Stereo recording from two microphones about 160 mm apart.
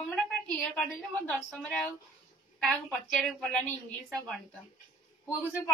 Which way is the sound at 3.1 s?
Centre (ahead or behind).